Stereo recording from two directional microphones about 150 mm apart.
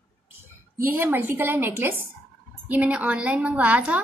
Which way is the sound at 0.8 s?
15° right (ahead or behind).